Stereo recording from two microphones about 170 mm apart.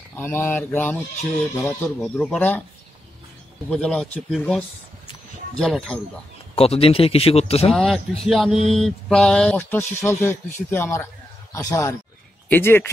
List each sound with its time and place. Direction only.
0.1 s speech: 15° left (ahead or behind)
3.7 s speech: 5° left (ahead or behind)
6.5 s speech: 35° left (ahead or behind)
7.7 s speech: centre (ahead or behind)